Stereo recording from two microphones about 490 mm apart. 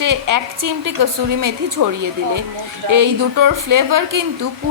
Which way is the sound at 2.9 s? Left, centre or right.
Right.